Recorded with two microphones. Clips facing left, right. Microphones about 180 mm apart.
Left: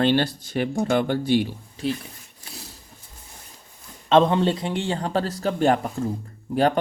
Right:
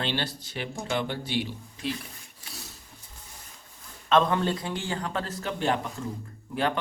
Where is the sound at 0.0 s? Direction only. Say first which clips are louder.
Left 11 dB; 50° left (ahead or behind).